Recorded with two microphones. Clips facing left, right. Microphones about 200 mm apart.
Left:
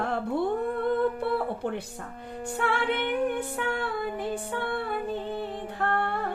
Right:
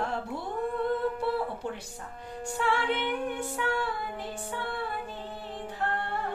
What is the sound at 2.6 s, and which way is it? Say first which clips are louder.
Music: left 1 dB; 55° left (ahead or behind).